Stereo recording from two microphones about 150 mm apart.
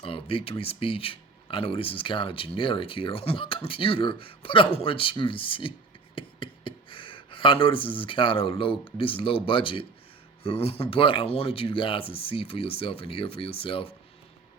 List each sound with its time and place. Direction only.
0.0 s speech: 35° left (ahead or behind)